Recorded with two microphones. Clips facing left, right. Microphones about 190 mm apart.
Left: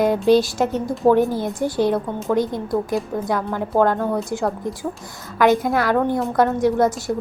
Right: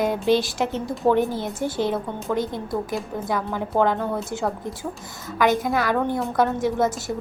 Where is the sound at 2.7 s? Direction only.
Centre (ahead or behind).